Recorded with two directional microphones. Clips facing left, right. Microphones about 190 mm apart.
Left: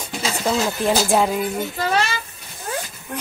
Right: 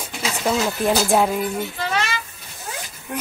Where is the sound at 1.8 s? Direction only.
40° left (ahead or behind).